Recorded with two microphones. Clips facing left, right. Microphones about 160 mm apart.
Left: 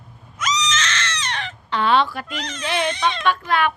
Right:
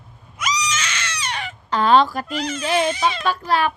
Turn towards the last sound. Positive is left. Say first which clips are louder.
# even
turn(degrees=-35)  # may be behind; listen again after turning